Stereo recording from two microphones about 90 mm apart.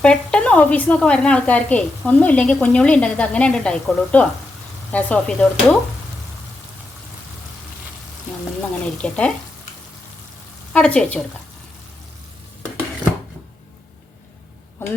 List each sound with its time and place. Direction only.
0.0 s a woman's voice: 10° left (ahead or behind)
9.0 s a woman's voice: 10° left (ahead or behind)
10.7 s speech: 10° left (ahead or behind)
14.8 s speech: 25° left (ahead or behind)